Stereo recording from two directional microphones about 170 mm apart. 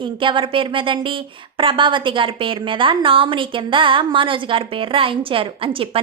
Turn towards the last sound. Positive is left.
turn(degrees=-30)  # may be behind; listen again after turning